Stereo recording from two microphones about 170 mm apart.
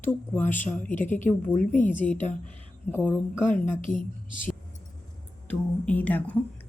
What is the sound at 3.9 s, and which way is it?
Speech, 50° left (ahead or behind).